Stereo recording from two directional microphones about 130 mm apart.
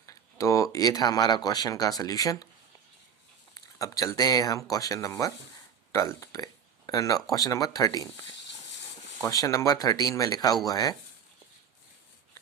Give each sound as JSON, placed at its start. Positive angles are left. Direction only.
{"t": 0.0, "sound": "speech", "side_deg": 25}
{"t": 3.5, "sound": "speech", "side_deg": 25}
{"t": 9.2, "sound": "speech", "side_deg": 25}